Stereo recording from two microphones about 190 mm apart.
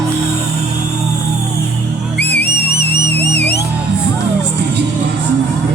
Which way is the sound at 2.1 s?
60° left (ahead or behind).